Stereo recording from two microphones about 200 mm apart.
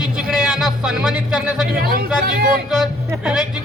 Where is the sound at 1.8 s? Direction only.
50° right (ahead or behind).